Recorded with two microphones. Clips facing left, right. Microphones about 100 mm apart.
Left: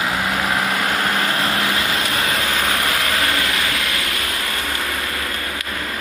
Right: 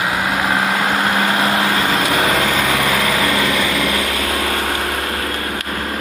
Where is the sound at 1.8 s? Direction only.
60° right (ahead or behind).